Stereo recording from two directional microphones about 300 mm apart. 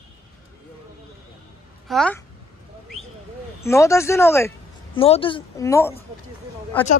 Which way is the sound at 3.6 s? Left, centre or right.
Centre.